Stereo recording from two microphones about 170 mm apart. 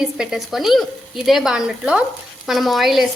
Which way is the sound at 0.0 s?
5° right (ahead or behind).